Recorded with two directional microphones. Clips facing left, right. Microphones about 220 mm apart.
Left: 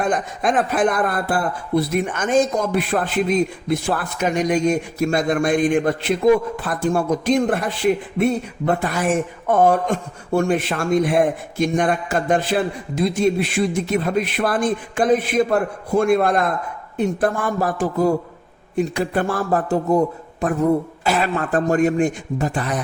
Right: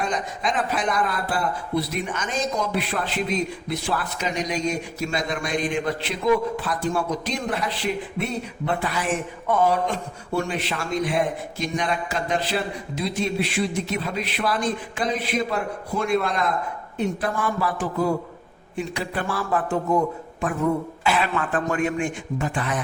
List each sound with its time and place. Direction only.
0.0 s a man's voice: 50° left (ahead or behind)